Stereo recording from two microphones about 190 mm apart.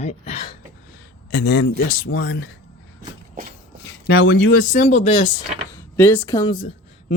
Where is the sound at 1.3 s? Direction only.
70° left (ahead or behind).